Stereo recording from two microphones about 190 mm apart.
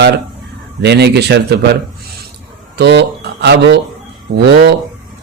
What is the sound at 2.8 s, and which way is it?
Speech, 60° right (ahead or behind).